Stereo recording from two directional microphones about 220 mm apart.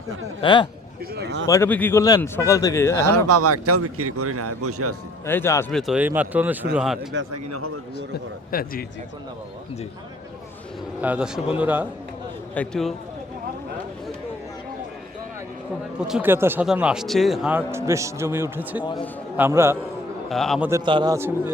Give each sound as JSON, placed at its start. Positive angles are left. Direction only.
{"t": 0.4, "sound": "speech", "side_deg": 20}
{"t": 1.1, "sound": "a man's voice", "side_deg": -50}
{"t": 1.5, "sound": "speech", "side_deg": 10}
{"t": 3.0, "sound": "speech", "side_deg": -90}
{"t": 5.2, "sound": "speech", "side_deg": 10}
{"t": 5.7, "sound": "a man's voice", "side_deg": 0}
{"t": 7.1, "sound": "speech", "side_deg": -60}
{"t": 8.5, "sound": "a man's voice", "side_deg": 40}
{"t": 11.0, "sound": "speech", "side_deg": -5}
{"t": 12.5, "sound": "a man's voice", "side_deg": 5}
{"t": 16.0, "sound": "speech", "side_deg": -5}
{"t": 20.3, "sound": "a man's voice", "side_deg": 0}
{"t": 20.7, "sound": "speech", "side_deg": -20}